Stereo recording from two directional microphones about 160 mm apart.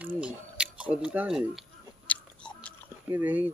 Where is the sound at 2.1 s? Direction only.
10° left (ahead or behind).